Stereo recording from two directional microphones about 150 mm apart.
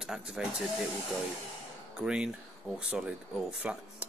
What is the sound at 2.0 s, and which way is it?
Speech, 5° right (ahead or behind).